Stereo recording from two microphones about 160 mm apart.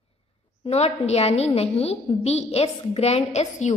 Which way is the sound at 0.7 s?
40° left (ahead or behind).